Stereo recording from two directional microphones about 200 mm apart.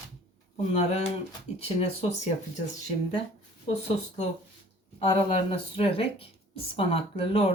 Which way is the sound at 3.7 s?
35° left (ahead or behind).